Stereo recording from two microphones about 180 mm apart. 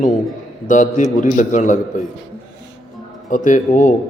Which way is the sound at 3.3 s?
45° left (ahead or behind).